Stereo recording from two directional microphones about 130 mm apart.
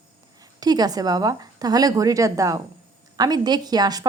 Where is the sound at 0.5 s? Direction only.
30° right (ahead or behind).